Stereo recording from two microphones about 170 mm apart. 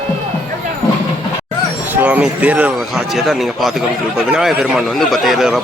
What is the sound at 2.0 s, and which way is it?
A man's voice, 10° right (ahead or behind).